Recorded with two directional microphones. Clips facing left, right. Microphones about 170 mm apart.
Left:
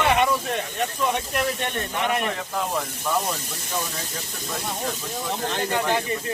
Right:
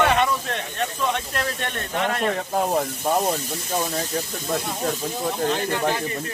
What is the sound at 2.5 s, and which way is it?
Speech, 40° right (ahead or behind).